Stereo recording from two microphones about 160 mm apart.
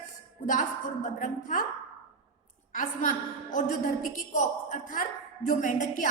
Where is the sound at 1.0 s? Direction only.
55° left (ahead or behind).